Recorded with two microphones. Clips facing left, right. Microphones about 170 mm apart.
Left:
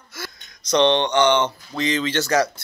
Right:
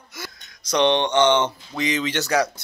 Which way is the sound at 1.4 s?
10° right (ahead or behind).